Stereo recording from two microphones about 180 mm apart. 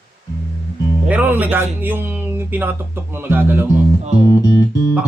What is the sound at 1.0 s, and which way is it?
Speech, 10° right (ahead or behind).